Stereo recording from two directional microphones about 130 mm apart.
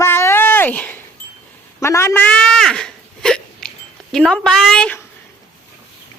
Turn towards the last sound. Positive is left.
turn(degrees=5)  # may be behind; listen again after turning